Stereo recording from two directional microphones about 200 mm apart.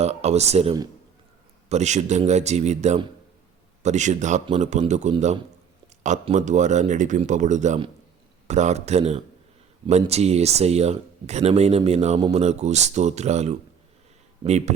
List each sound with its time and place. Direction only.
0.0 s speech: 30° right (ahead or behind)